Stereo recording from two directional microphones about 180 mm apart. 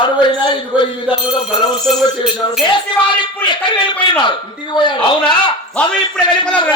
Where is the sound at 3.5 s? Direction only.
25° left (ahead or behind).